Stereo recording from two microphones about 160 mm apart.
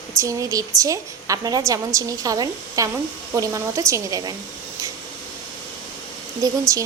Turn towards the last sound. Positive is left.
turn(degrees=-25)  # may be behind; listen again after turning